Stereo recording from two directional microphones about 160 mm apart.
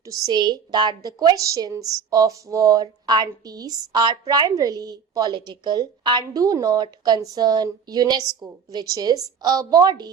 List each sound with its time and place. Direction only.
0.0 s a woman's voice: 20° right (ahead or behind)